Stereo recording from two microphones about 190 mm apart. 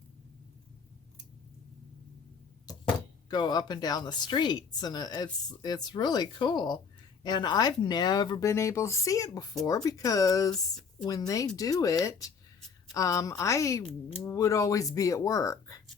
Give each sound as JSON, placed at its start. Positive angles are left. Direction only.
{"t": 3.2, "sound": "speech", "side_deg": 20}